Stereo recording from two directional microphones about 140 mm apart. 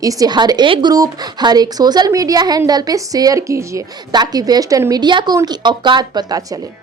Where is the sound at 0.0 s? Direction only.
25° right (ahead or behind).